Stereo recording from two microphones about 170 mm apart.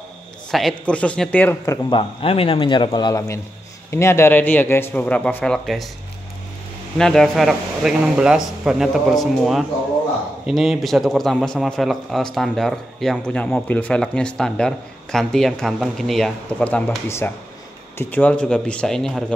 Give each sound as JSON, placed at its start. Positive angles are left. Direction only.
{"t": 0.5, "sound": "a man's voice", "side_deg": 0}
{"t": 7.0, "sound": "a man's voice", "side_deg": 5}